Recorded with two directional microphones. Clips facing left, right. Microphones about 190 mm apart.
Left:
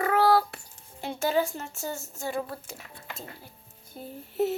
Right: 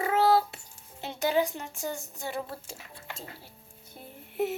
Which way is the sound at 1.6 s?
15° right (ahead or behind).